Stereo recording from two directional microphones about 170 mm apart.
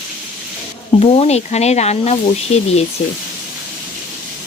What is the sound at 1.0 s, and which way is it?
Speech, 40° left (ahead or behind).